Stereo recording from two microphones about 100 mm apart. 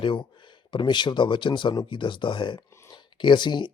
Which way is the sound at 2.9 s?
50° left (ahead or behind).